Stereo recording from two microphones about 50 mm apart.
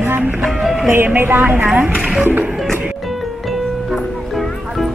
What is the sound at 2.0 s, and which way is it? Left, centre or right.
Speech, centre.